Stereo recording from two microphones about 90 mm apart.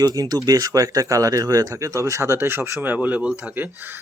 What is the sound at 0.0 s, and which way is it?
Speech, 45° right (ahead or behind).